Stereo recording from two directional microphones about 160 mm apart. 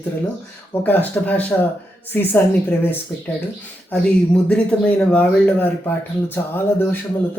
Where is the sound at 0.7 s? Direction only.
10° left (ahead or behind).